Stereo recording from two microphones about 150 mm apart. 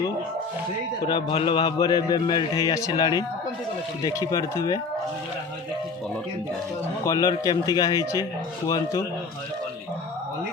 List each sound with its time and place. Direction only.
1.0 s a man's voice: 35° left (ahead or behind)
7.0 s a man's voice: 25° left (ahead or behind)